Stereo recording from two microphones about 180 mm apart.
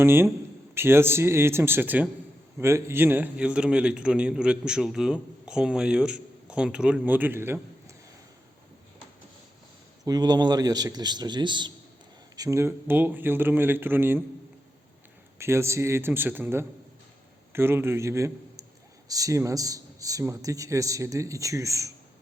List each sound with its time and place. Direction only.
0.0 s a man's voice: 15° right (ahead or behind)
10.1 s a man's voice: 20° right (ahead or behind)
15.4 s a man's voice: 15° right (ahead or behind)